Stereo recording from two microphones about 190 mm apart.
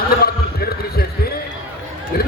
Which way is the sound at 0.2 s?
55° left (ahead or behind).